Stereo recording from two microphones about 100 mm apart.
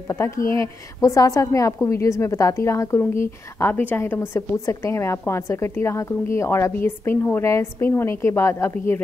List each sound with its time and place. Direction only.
0.1 s a woman's voice: 30° left (ahead or behind)